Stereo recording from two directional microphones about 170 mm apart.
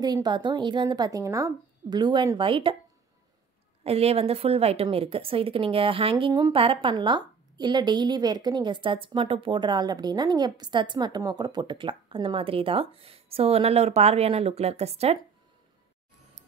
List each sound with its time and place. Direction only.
0.0 s a woman's voice: 25° right (ahead or behind)
3.8 s a woman's voice: 35° right (ahead or behind)